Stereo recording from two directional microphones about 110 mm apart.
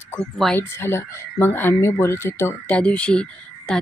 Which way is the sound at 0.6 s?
20° left (ahead or behind).